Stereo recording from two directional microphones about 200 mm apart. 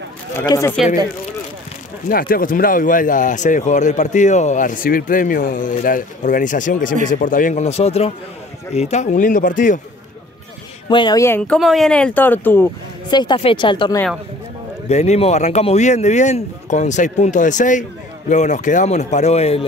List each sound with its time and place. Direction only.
0.4 s speech: 15° left (ahead or behind)
2.0 s speech: 45° left (ahead or behind)
10.9 s speech: 20° left (ahead or behind)
13.1 s speech: 20° left (ahead or behind)